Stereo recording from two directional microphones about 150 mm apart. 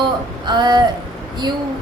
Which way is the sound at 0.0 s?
30° right (ahead or behind).